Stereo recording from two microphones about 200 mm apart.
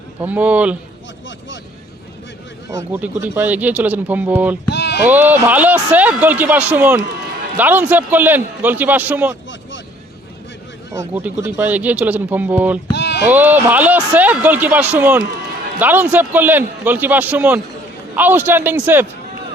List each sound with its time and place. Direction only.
0.3 s speech: 5° right (ahead or behind)
2.9 s speech: 10° right (ahead or behind)
4.7 s a sound: 55° left (ahead or behind)
5.0 s speech: 10° right (ahead or behind)
11.1 s speech: 10° right (ahead or behind)
12.9 s a sound: 60° left (ahead or behind)
13.2 s speech: 10° right (ahead or behind)